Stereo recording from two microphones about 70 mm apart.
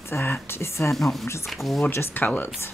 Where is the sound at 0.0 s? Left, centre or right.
Left.